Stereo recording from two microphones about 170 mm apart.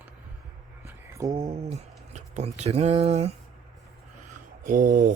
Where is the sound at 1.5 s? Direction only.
40° right (ahead or behind).